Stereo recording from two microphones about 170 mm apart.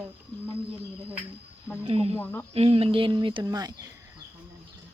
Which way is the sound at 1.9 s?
35° right (ahead or behind).